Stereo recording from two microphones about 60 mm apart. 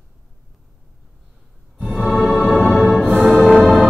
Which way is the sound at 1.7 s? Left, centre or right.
Centre.